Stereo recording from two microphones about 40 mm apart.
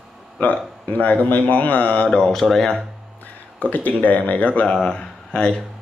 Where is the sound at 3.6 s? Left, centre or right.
Left.